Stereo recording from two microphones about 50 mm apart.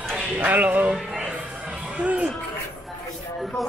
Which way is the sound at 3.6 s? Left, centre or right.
Centre.